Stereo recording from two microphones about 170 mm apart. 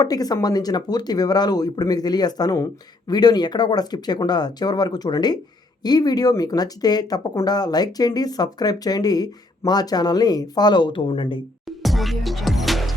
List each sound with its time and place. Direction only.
0.0 s speech: 20° left (ahead or behind)
11.8 s music: centre (ahead or behind)